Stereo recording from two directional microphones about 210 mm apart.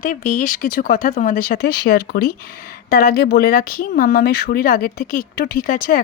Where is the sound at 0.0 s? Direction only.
40° left (ahead or behind).